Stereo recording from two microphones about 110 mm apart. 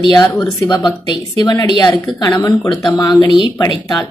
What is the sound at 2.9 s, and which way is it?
A woman's voice, 40° left (ahead or behind).